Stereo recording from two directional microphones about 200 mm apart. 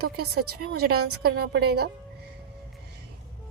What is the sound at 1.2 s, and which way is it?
Speech, 75° right (ahead or behind).